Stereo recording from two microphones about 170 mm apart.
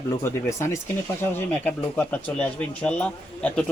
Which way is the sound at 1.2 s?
10° left (ahead or behind).